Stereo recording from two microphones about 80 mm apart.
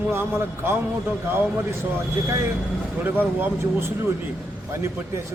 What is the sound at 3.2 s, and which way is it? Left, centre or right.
Speech, right.